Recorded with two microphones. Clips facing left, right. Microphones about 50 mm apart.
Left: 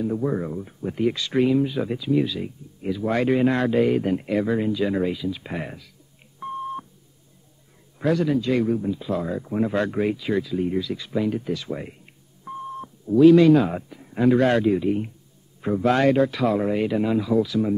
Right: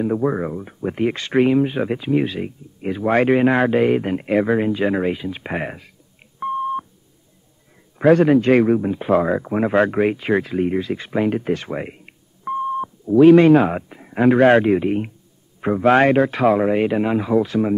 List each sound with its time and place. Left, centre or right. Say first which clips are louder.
0.0 s speech: right 5 dB; right
6.4 s beep: right 8 dB; centre
8.0 s speech: right 8 dB; right